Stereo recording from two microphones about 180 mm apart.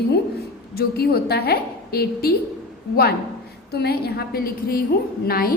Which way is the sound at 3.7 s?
60° left (ahead or behind).